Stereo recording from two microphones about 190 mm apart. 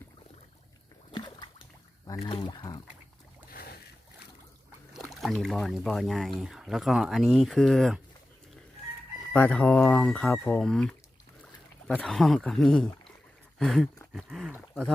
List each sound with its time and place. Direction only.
1.1 s rowboat: 25° left (ahead or behind)
2.1 s speech: 25° left (ahead or behind)
3.5 s boat: 55° left (ahead or behind)
4.9 s speech: centre (ahead or behind)
9.3 s speech: 5° left (ahead or behind)